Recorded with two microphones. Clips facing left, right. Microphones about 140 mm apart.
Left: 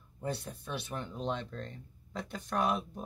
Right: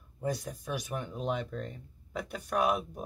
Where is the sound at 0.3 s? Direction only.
10° right (ahead or behind).